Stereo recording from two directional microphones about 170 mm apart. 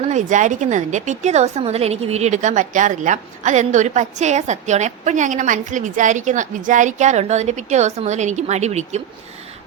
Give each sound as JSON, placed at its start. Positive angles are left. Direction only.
{"t": 0.1, "sound": "a woman's voice", "side_deg": -45}